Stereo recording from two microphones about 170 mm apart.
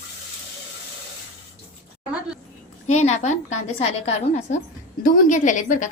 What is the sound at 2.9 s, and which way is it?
A woman's voice, 40° left (ahead or behind).